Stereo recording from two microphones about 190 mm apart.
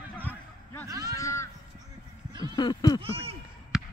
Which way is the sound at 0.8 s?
15° right (ahead or behind).